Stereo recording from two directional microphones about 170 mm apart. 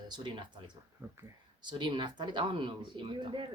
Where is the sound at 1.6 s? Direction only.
25° right (ahead or behind).